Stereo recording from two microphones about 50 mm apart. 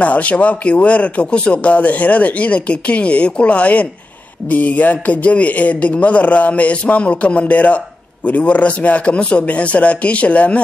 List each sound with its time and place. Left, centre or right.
0.0 s speech: left